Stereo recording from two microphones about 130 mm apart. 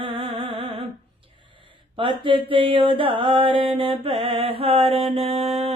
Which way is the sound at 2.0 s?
40° right (ahead or behind).